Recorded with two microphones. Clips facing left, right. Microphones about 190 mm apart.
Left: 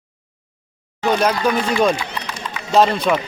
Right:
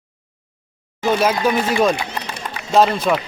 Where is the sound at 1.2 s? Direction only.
5° right (ahead or behind).